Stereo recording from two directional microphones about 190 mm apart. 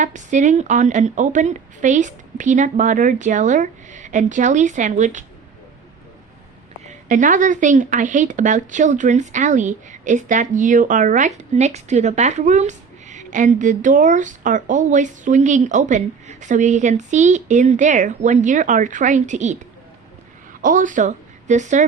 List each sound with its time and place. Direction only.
0.0 s speech: 40° right (ahead or behind)
6.8 s a woman's voice: 45° right (ahead or behind)